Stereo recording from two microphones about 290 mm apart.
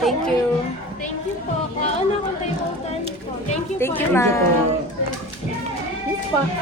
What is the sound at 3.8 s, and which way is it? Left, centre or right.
Speech, centre.